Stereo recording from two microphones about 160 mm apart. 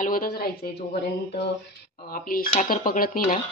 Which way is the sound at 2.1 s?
65° left (ahead or behind).